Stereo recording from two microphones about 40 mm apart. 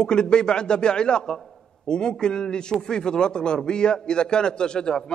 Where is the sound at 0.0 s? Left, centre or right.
Left.